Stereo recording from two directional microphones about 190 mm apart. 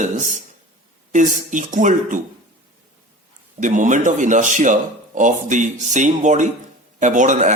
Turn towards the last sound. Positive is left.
turn(degrees=-40)  # may be behind; listen again after turning